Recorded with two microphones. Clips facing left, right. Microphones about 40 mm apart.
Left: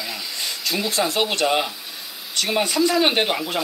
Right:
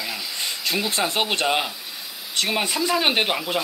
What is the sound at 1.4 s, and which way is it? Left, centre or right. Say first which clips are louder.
Speech: left 4 dB; centre.